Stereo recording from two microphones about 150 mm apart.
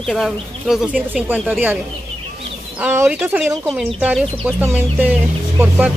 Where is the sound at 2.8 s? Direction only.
10° right (ahead or behind).